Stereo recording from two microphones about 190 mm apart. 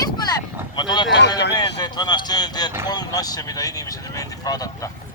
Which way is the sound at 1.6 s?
20° left (ahead or behind).